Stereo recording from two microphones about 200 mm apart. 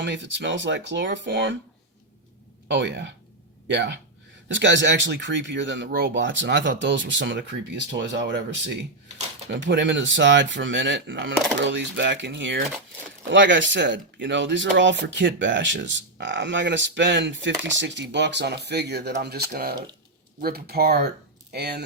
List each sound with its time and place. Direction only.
0.0 s speech: 65° right (ahead or behind)
2.6 s speech: 65° right (ahead or behind)